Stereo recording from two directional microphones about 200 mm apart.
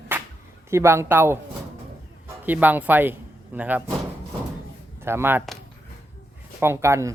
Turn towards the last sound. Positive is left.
turn(degrees=-15)  # may be behind; listen again after turning